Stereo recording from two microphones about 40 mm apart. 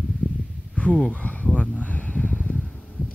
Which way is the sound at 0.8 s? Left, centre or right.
Left.